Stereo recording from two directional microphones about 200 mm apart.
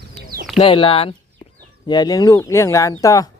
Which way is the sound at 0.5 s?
25° left (ahead or behind).